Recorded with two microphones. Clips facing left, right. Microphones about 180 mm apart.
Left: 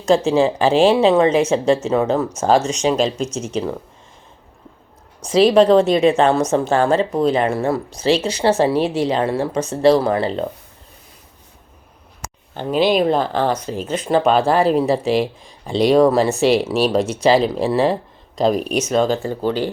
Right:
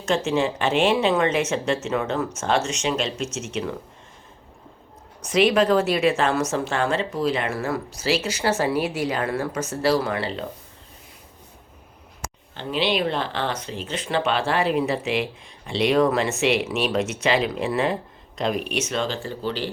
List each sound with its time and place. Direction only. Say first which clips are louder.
0.3 s speech: left 7 dB; 30° left (ahead or behind)
5.2 s speech: left 6 dB; 30° left (ahead or behind)
12.2 s speech: left 6 dB; 45° left (ahead or behind)